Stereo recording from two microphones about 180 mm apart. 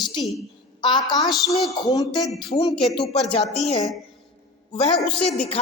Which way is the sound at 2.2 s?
Centre (ahead or behind).